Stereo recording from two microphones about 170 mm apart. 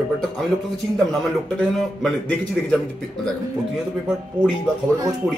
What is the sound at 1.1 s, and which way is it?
A man's voice, centre (ahead or behind).